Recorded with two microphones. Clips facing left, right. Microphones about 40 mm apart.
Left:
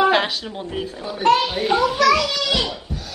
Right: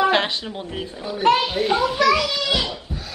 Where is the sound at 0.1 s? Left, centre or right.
Centre.